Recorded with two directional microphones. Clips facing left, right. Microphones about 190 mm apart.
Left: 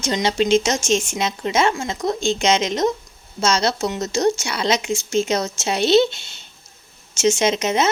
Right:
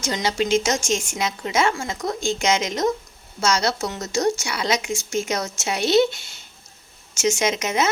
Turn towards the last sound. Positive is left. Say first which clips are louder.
# left 3 dB
turn(degrees=25)  # may be behind; listen again after turning